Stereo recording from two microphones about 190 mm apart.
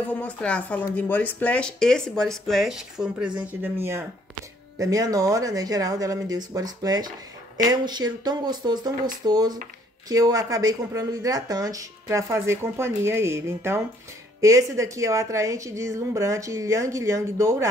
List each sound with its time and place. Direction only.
0.0 s speech: 5° left (ahead or behind); by 17.6 s 15° right (ahead or behind)